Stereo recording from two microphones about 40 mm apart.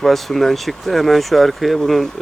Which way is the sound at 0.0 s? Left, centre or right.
Centre.